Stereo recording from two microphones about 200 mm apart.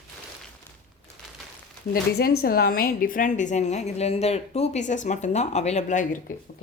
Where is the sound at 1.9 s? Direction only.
50° left (ahead or behind).